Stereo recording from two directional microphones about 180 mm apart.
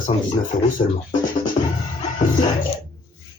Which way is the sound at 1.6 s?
35° left (ahead or behind).